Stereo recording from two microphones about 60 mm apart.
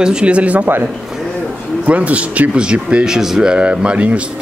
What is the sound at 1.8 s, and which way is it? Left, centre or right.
Speech, right.